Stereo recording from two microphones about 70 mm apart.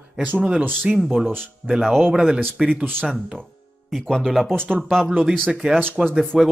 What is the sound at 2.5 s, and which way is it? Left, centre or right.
Speech, centre.